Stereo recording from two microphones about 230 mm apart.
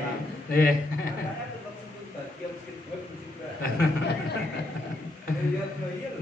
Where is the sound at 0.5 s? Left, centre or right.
Left.